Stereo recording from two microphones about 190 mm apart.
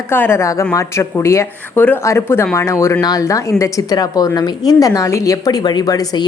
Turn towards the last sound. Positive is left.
turn(degrees=20)  # may be behind; listen again after turning